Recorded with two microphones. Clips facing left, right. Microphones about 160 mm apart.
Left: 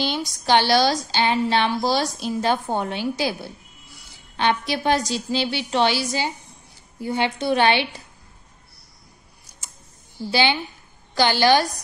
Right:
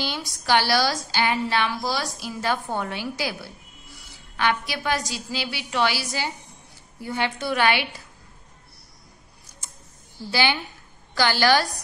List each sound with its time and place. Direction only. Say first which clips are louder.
0.0 s a woman's voice: left 5 dB; 20° left (ahead or behind)
10.3 s a woman's voice: left 3 dB; 20° left (ahead or behind)